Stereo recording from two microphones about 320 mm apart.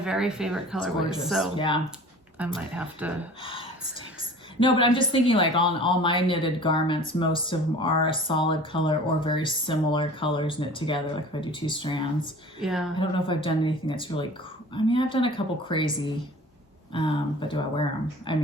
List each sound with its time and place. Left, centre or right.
0.0 s speech: centre
1.5 s speech: centre
2.4 s speech: centre
3.4 s speech: centre
12.6 s speech: centre
13.0 s speech: centre